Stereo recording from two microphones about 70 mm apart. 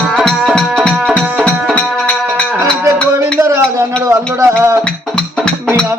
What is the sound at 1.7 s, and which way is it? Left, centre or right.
Music, centre.